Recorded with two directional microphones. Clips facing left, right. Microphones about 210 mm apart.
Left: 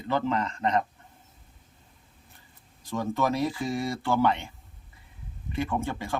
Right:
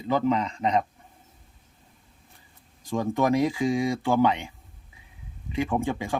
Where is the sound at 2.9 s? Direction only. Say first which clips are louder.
Right 4 dB; 15° right (ahead or behind).